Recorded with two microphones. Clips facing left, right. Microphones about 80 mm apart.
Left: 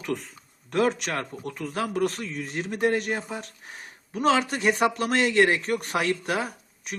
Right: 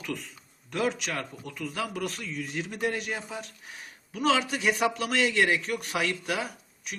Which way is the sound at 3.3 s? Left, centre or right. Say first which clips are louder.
Left 3 dB; left.